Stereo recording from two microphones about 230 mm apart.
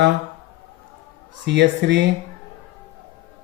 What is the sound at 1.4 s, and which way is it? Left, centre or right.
Speech, right.